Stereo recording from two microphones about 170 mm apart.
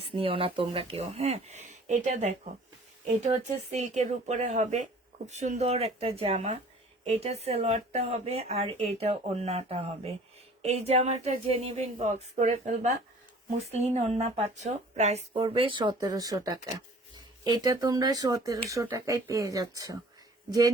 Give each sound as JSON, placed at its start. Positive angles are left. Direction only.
{"t": 0.0, "sound": "speech", "side_deg": -35}